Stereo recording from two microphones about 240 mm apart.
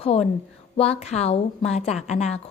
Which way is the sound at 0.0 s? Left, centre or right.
Left.